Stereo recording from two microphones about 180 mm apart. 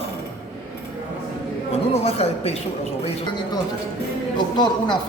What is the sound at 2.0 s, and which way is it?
Speech, 35° left (ahead or behind).